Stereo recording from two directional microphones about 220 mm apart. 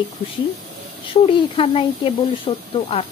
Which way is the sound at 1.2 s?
25° left (ahead or behind).